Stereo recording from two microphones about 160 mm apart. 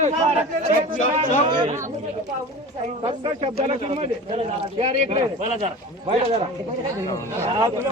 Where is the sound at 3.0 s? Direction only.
35° right (ahead or behind).